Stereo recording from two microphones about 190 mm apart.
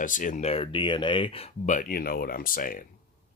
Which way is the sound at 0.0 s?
45° left (ahead or behind).